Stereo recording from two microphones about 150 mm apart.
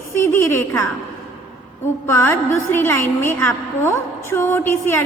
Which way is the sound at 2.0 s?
15° left (ahead or behind).